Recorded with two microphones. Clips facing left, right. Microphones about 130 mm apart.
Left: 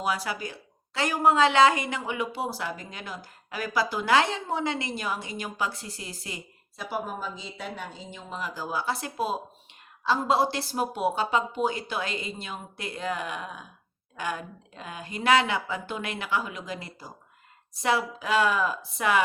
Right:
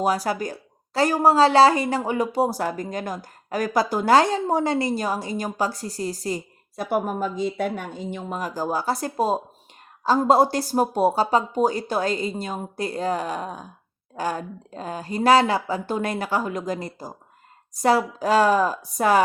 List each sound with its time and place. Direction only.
0.0 s speech: 40° right (ahead or behind)
6.9 s a woman's voice: 55° right (ahead or behind); by 19.2 s 40° right (ahead or behind)